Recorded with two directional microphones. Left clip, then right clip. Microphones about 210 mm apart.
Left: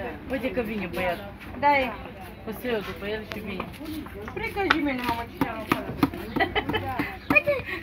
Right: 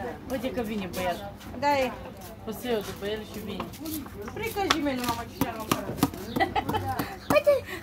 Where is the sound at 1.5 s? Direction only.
65° right (ahead or behind).